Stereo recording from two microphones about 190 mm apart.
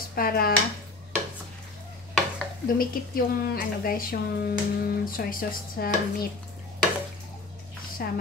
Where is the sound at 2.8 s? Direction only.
50° left (ahead or behind).